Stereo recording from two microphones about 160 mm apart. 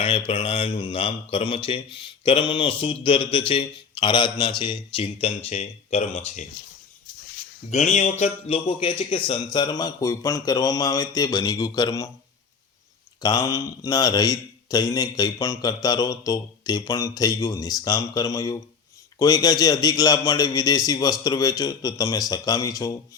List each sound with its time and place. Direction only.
0.3 s a man's voice: 35° left (ahead or behind)
7.7 s speech: 45° left (ahead or behind); by 12.1 s 20° left (ahead or behind)
13.2 s speech: 20° left (ahead or behind)